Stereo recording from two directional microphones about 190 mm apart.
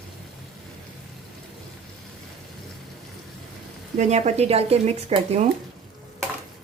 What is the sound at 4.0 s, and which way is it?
A woman's voice, 35° right (ahead or behind).